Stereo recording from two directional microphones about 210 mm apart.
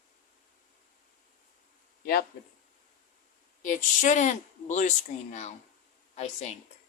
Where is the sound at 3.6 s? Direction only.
35° left (ahead or behind).